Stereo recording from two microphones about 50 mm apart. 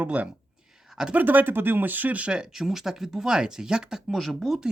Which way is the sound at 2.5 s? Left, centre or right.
Centre.